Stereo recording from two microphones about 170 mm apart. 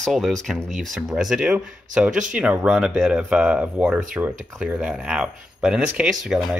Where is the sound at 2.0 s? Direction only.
50° right (ahead or behind).